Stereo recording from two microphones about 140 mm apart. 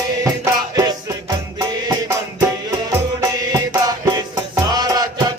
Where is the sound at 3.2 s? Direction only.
25° right (ahead or behind).